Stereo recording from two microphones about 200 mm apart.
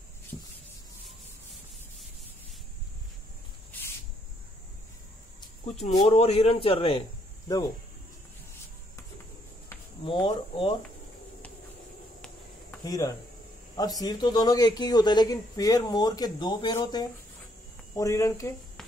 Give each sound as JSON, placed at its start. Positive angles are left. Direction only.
{"t": 5.7, "sound": "speech", "side_deg": 35}
{"t": 10.0, "sound": "speech", "side_deg": 25}
{"t": 12.8, "sound": "speech", "side_deg": 20}